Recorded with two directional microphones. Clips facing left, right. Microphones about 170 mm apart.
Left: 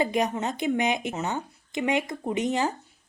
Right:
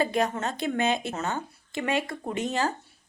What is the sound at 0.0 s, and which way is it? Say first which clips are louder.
Speech: left 1 dB; 15° left (ahead or behind).